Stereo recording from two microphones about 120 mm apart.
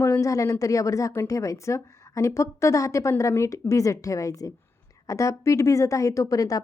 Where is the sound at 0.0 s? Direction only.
25° left (ahead or behind).